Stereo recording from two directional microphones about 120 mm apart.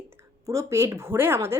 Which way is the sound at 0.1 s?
25° right (ahead or behind).